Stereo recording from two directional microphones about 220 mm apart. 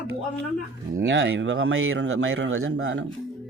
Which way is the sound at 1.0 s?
55° right (ahead or behind).